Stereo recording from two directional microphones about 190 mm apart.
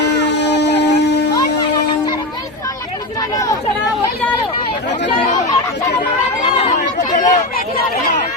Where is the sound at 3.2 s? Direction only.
20° left (ahead or behind).